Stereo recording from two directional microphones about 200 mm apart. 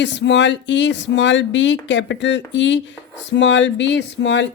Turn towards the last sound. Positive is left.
turn(degrees=60)  # may be behind; listen again after turning